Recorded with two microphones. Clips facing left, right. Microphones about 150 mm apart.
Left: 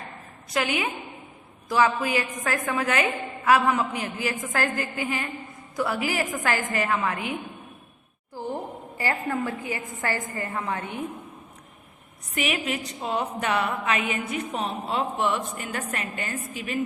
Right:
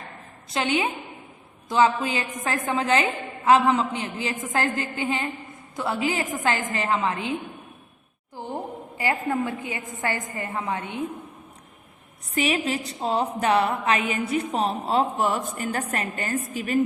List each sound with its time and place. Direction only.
0.5 s a woman's voice: 25° right (ahead or behind)
8.4 s a sound: 20° right (ahead or behind)
9.0 s a woman's voice: 20° right (ahead or behind)
12.3 s a woman's voice: 30° right (ahead or behind)